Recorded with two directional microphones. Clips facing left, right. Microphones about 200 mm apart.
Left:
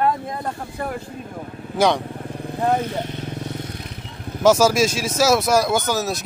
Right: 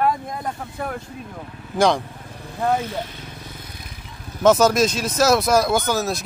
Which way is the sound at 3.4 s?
70° left (ahead or behind).